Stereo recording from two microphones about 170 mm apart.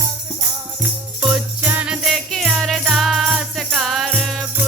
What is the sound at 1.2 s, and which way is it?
Music, 5° right (ahead or behind).